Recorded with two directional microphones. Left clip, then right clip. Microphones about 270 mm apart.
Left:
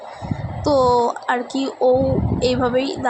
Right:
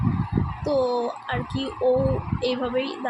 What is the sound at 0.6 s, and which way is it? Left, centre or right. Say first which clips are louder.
Speech: left 8 dB; centre.